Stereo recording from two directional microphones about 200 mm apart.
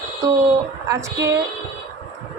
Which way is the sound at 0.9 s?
15° right (ahead or behind).